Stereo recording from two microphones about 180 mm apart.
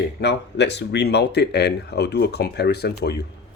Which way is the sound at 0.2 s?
70° left (ahead or behind).